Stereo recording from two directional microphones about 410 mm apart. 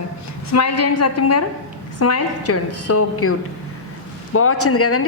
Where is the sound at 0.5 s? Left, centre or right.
Left.